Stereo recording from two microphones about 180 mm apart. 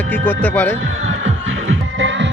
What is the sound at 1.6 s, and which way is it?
Music, 90° right.